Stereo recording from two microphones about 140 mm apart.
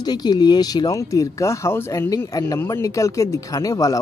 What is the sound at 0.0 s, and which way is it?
Speech, 30° left (ahead or behind).